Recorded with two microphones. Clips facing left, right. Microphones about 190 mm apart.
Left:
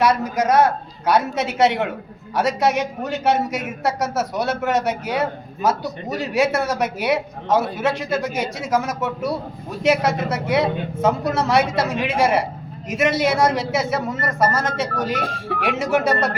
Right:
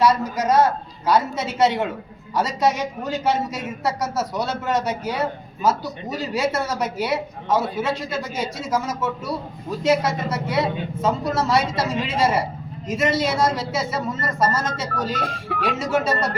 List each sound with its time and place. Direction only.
0.0 s speech: 65° left (ahead or behind)